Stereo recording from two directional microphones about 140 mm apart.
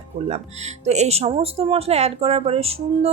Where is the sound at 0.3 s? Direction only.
50° right (ahead or behind).